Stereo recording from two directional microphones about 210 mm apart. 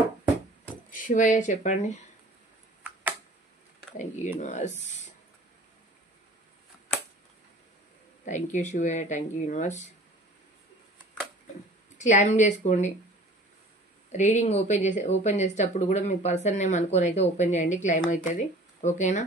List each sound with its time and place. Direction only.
0.9 s speech: 40° left (ahead or behind)
2.8 s a sound: 5° right (ahead or behind)
3.9 s speech: 35° left (ahead or behind)
8.3 s speech: 35° left (ahead or behind)
12.0 s speech: 35° left (ahead or behind)
14.1 s speech: 35° left (ahead or behind)